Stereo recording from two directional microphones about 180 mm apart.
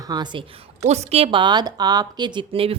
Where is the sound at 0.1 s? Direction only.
25° right (ahead or behind).